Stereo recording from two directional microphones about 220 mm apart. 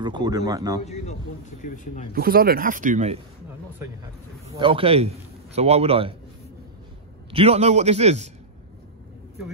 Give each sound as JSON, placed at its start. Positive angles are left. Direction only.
{"t": 0.0, "sound": "speech", "side_deg": -20}
{"t": 0.8, "sound": "speech", "side_deg": 30}
{"t": 2.1, "sound": "speech", "side_deg": -45}
{"t": 4.6, "sound": "a man's voice", "side_deg": -25}
{"t": 7.2, "sound": "a man's voice", "side_deg": -25}